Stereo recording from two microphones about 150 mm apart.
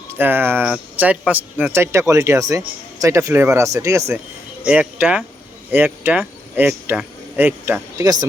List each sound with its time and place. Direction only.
0.2 s speech: 15° right (ahead or behind)